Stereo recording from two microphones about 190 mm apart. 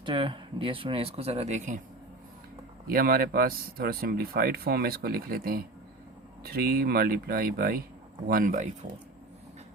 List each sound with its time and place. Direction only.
0.0 s speech: 25° right (ahead or behind)
2.8 s speech: 50° right (ahead or behind)